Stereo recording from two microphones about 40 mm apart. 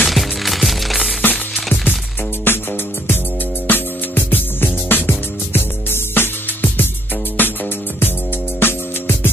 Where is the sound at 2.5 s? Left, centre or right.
Left.